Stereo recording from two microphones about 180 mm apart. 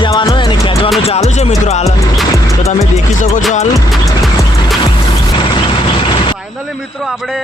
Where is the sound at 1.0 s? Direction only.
35° left (ahead or behind).